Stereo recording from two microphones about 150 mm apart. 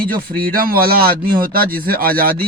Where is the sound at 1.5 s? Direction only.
75° right (ahead or behind).